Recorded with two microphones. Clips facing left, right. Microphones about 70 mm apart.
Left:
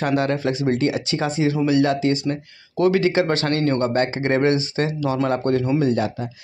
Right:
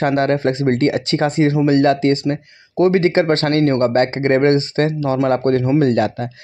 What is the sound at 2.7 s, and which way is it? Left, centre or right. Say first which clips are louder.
Speech: right 4 dB; right.